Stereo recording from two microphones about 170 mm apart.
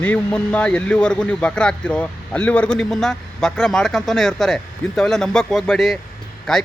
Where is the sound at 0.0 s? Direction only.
10° left (ahead or behind).